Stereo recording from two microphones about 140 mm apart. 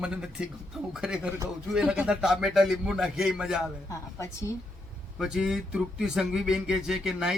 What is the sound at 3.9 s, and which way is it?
Speech, 20° left (ahead or behind).